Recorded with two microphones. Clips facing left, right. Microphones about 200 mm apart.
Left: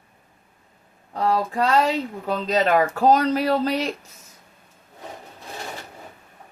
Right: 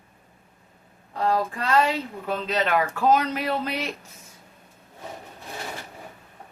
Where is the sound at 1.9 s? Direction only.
40° left (ahead or behind).